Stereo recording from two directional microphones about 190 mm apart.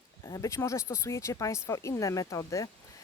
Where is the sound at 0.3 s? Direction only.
15° left (ahead or behind).